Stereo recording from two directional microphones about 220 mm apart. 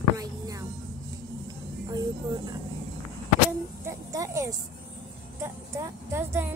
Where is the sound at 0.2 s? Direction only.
15° right (ahead or behind).